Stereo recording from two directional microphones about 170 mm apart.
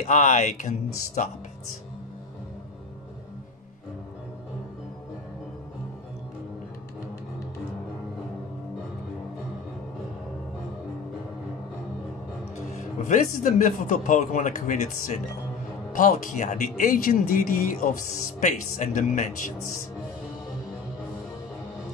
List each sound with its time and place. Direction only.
0.0 s speech: 45° left (ahead or behind)
12.7 s speech: 45° left (ahead or behind)